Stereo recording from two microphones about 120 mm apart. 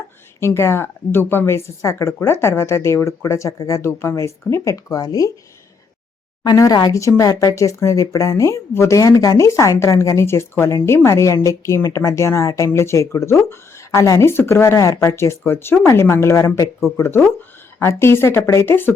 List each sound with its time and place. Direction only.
0.3 s a woman's voice: 20° left (ahead or behind)
6.4 s a woman's voice: 35° left (ahead or behind); by 18.9 s 20° left (ahead or behind)